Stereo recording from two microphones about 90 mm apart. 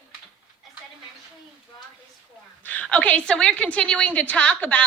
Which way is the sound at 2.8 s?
15° left (ahead or behind).